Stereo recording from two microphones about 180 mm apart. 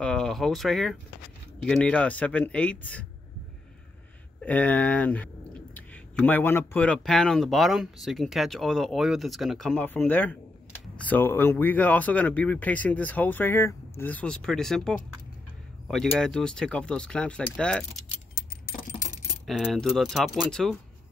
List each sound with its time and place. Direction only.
0.0 s speech: 5° left (ahead or behind)
4.4 s speech: 10° left (ahead or behind)
18.3 s keys jangling: 50° left (ahead or behind)
19.4 s speech: centre (ahead or behind)